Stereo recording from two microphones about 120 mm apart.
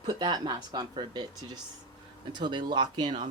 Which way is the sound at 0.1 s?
35° right (ahead or behind).